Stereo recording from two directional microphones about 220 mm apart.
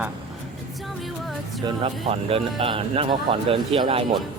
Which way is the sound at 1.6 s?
25° right (ahead or behind).